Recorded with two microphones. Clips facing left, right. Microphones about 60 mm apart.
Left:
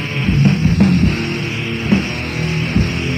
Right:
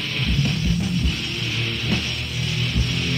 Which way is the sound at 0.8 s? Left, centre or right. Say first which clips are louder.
Left 11 dB; left.